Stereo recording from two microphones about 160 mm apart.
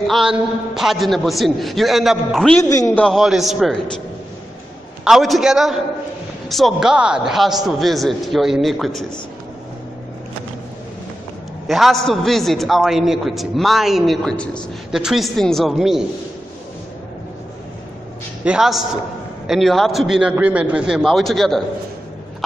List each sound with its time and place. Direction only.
0.0 s a man's voice: centre (ahead or behind)
2.7 s a man's voice: 20° left (ahead or behind)
3.0 s a man's voice: centre (ahead or behind)
5.0 s a man's voice: centre (ahead or behind)
11.6 s a man's voice: centre (ahead or behind)
18.4 s a man's voice: 5° right (ahead or behind)